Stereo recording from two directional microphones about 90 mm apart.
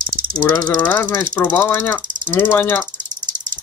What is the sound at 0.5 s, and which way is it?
Speech, 25° left (ahead or behind).